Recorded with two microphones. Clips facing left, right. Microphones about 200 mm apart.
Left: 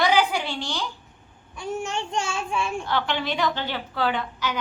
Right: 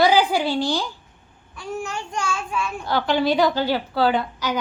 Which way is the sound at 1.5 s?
25° left (ahead or behind).